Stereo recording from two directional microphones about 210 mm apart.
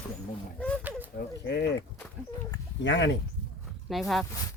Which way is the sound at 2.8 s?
60° left (ahead or behind).